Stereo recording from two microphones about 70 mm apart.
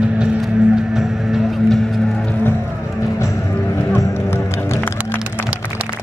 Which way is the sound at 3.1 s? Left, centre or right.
Left.